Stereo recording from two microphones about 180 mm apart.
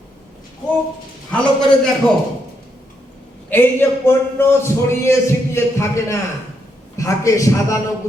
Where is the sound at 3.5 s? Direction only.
10° left (ahead or behind).